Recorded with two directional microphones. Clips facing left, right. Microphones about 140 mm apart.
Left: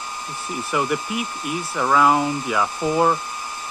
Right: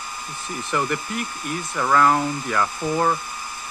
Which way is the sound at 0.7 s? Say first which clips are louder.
Left 2 dB; 10° left (ahead or behind).